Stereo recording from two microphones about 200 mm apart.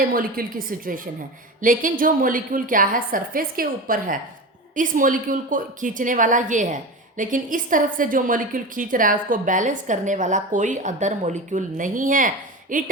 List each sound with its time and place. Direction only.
0.0 s a woman's voice: 45° right (ahead or behind)